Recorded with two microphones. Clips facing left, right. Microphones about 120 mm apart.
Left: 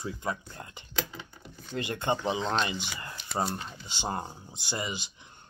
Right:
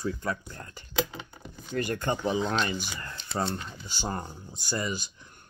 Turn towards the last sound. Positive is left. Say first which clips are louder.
# right 3 dB
turn(degrees=20)  # may be behind; listen again after turning